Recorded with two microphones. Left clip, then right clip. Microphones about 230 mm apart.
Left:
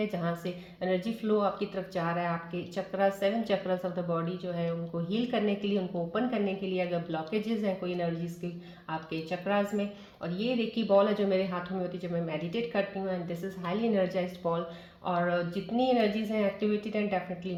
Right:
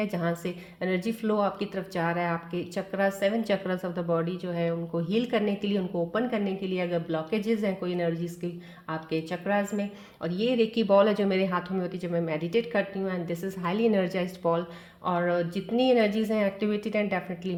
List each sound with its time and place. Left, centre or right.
0.0 s a woman's voice: right